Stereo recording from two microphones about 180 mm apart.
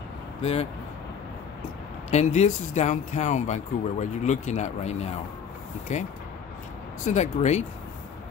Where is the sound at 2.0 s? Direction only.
40° left (ahead or behind).